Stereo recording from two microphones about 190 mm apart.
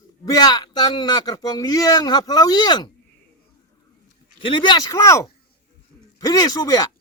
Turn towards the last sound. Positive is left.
turn(degrees=20)  # may be behind; listen again after turning